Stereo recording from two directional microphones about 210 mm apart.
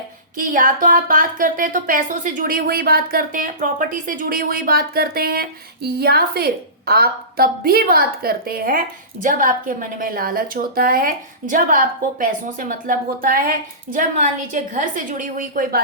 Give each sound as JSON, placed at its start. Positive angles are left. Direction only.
{"t": 0.3, "sound": "a woman's voice", "side_deg": -40}